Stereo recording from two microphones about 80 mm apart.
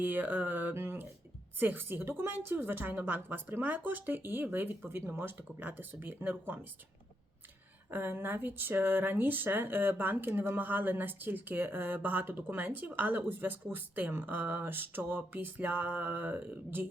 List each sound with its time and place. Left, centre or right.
0.0 s speech: right
7.9 s speech: right